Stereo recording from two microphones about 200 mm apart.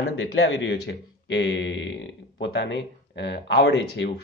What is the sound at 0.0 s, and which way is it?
Speech, 65° left (ahead or behind).